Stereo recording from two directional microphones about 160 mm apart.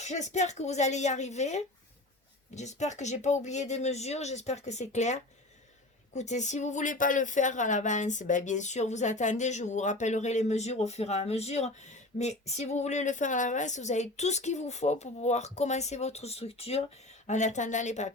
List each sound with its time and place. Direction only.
0.0 s speech: 45° left (ahead or behind)